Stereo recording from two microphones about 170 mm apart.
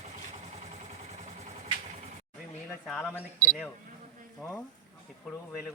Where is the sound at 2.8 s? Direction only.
Centre (ahead or behind).